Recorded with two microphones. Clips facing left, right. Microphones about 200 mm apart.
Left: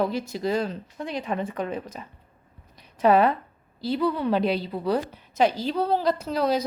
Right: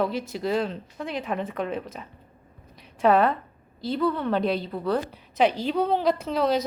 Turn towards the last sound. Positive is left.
turn(degrees=0)  # may be behind; listen again after turning